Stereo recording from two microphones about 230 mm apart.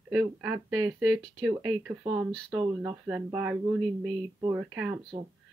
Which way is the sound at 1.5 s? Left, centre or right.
Centre.